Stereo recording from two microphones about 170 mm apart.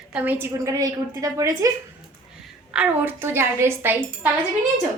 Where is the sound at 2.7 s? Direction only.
10° right (ahead or behind).